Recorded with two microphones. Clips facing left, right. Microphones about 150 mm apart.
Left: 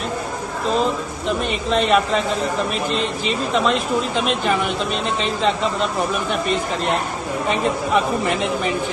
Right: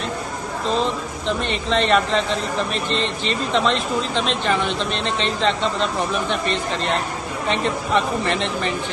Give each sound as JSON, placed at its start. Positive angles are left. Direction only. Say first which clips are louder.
{"t": 1.3, "sound": "speech", "louder": "left 1 dB", "side_deg": 5}
{"t": 7.4, "sound": "speech", "louder": "left 1 dB", "side_deg": 5}